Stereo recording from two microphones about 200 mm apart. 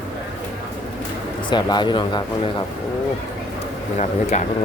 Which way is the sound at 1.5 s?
20° left (ahead or behind).